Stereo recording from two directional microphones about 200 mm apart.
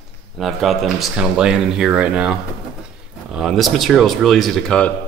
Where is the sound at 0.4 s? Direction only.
Centre (ahead or behind).